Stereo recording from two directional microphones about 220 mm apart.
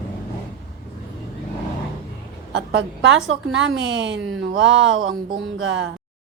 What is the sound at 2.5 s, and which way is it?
A woman's voice, 55° right (ahead or behind).